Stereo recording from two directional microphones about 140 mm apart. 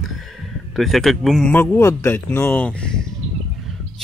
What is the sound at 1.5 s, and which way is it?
A man's voice, 15° left (ahead or behind).